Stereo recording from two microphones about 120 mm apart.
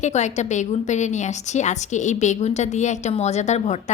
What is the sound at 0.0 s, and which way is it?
A woman's voice, 75° left (ahead or behind).